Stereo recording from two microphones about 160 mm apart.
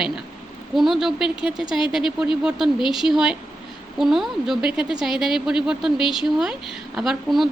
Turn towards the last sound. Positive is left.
turn(degrees=0)  # may be behind; listen again after turning